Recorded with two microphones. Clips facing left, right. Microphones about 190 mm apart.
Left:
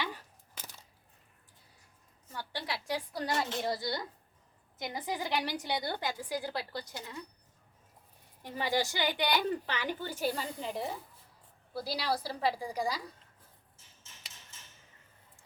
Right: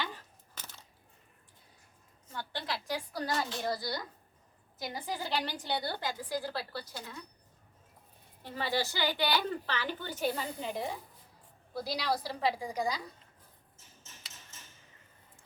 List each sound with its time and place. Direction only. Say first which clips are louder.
0.0 s a sound: left 1 dB; 10° left (ahead or behind)
2.3 s a woman's voice: right 1 dB; 10° left (ahead or behind)
3.2 s a child's voice: left 1 dB; 25° left (ahead or behind)
8.4 s a woman's voice: left 1 dB; 15° left (ahead or behind)